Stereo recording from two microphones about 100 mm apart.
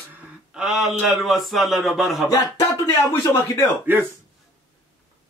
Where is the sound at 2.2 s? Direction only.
35° left (ahead or behind).